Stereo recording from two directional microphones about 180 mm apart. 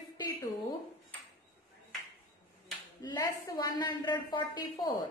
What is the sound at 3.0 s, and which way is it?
A man's voice, 20° left (ahead or behind).